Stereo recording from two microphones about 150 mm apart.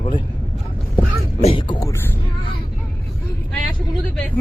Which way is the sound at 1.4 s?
35° left (ahead or behind).